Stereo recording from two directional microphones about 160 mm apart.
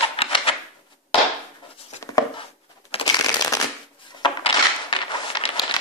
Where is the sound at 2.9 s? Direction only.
30° left (ahead or behind).